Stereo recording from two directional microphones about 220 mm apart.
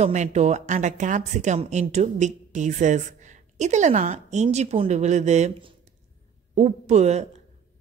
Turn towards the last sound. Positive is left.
turn(degrees=-30)  # may be behind; listen again after turning